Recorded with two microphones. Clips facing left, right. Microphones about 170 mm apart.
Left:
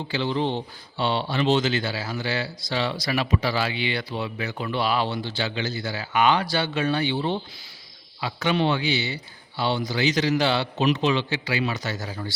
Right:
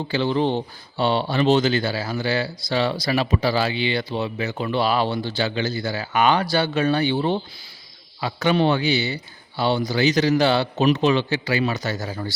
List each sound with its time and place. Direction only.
0.1 s a man's voice: 45° right (ahead or behind)